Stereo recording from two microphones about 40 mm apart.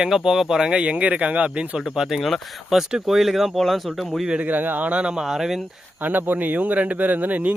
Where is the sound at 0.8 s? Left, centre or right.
Right.